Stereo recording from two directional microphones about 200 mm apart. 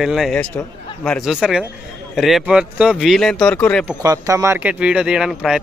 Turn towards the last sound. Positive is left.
turn(degrees=-5)  # may be behind; listen again after turning